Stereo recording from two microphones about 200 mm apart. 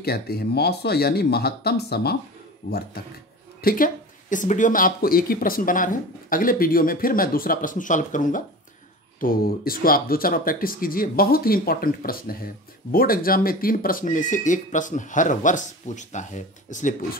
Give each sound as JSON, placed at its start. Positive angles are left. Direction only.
{"t": 0.0, "sound": "speech", "side_deg": 50}